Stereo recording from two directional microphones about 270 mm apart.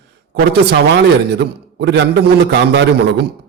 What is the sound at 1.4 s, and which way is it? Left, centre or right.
A man's voice, right.